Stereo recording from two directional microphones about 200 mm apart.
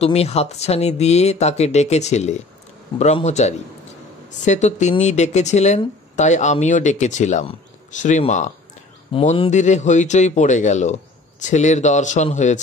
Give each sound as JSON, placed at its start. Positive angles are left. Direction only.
{"t": 0.0, "sound": "speech", "side_deg": 30}